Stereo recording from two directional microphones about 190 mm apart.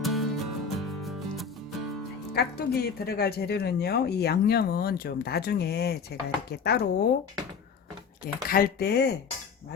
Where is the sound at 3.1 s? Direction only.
55° left (ahead or behind).